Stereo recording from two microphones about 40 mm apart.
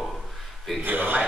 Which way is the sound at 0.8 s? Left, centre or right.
Right.